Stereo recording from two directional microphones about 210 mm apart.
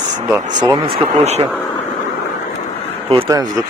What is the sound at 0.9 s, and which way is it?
Speech, 30° right (ahead or behind).